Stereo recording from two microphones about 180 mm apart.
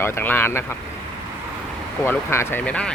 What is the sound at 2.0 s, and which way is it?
Speech, 15° left (ahead or behind).